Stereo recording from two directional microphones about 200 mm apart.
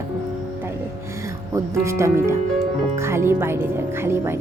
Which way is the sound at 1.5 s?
15° right (ahead or behind).